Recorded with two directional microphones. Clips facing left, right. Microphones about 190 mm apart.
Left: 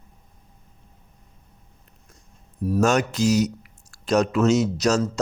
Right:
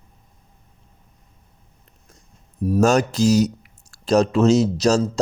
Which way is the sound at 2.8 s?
35° right (ahead or behind).